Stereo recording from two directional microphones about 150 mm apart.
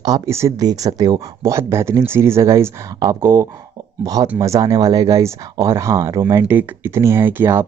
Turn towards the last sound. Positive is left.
turn(degrees=-15)  # may be behind; listen again after turning